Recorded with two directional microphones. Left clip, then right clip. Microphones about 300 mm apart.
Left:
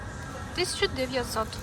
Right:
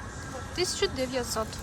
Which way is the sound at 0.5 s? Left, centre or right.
Centre.